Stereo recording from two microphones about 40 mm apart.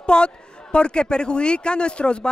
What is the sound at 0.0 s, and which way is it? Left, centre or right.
A man's voice, left.